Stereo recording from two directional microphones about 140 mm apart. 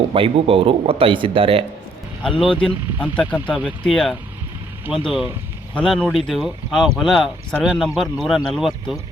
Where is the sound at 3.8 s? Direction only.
Centre (ahead or behind).